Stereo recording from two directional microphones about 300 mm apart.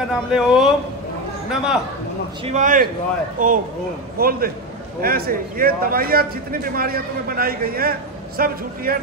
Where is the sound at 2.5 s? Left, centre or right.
Right.